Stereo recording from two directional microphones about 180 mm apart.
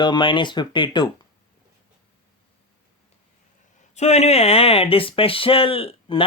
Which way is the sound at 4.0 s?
35° left (ahead or behind).